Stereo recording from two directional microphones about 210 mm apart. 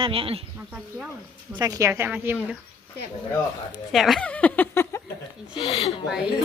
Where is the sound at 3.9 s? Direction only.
Centre (ahead or behind).